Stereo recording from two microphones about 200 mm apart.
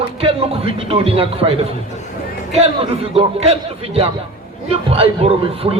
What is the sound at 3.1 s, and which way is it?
Speech, 30° right (ahead or behind).